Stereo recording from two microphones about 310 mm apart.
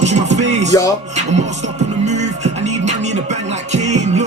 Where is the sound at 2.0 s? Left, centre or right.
Right.